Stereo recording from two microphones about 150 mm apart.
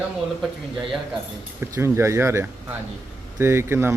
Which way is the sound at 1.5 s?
20° right (ahead or behind).